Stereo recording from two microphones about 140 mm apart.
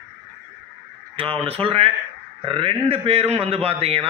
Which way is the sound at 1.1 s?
40° right (ahead or behind).